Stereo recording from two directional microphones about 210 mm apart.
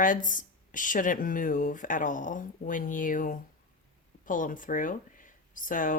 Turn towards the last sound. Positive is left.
turn(degrees=40)  # may be behind; listen again after turning